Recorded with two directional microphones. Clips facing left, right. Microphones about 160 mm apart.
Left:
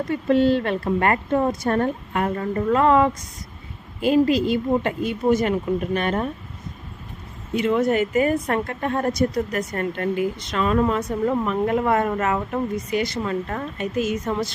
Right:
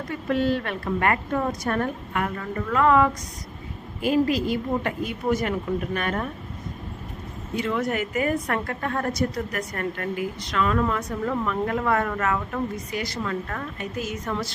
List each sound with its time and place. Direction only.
0.1 s a woman's voice: 25° left (ahead or behind)
7.5 s a woman's voice: 20° left (ahead or behind)